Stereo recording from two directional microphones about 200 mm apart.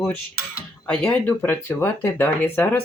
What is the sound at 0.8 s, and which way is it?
Speech, 5° left (ahead or behind).